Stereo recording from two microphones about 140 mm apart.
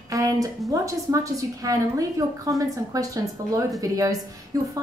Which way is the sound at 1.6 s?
25° right (ahead or behind).